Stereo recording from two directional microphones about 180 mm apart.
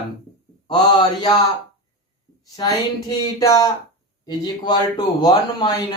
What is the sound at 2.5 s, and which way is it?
Speech, 20° left (ahead or behind).